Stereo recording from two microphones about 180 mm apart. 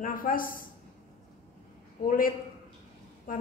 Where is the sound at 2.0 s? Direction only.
50° left (ahead or behind).